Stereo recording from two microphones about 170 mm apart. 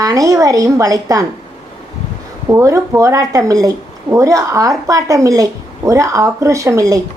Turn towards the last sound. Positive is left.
turn(degrees=-20)  # may be behind; listen again after turning